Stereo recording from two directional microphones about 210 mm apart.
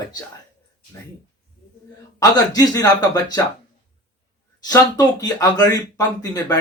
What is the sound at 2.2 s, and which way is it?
Speech, 15° left (ahead or behind).